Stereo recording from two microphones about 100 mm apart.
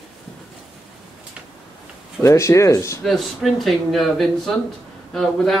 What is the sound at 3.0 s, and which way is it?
Speech, centre (ahead or behind).